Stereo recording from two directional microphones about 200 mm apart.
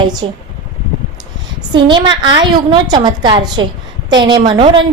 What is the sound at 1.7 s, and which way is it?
A woman's voice, 25° right (ahead or behind).